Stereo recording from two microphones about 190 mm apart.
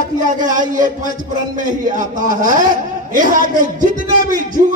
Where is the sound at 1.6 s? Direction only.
45° right (ahead or behind).